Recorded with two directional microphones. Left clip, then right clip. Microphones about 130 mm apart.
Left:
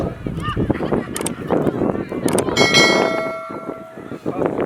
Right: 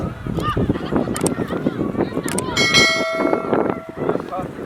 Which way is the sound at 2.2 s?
Centre (ahead or behind).